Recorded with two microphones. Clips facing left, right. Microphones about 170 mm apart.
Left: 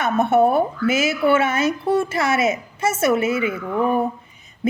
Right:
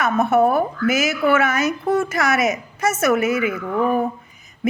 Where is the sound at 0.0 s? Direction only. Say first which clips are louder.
Even; 25° left (ahead or behind).